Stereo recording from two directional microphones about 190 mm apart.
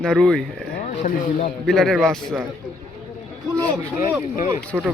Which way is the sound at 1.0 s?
45° left (ahead or behind).